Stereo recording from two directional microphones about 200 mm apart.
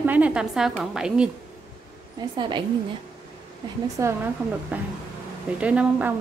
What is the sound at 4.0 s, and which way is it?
A woman's voice, 10° right (ahead or behind).